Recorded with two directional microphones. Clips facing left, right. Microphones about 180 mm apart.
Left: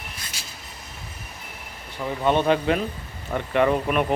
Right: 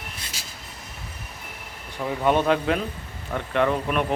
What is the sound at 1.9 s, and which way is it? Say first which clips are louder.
Speech: even; 5° right (ahead or behind).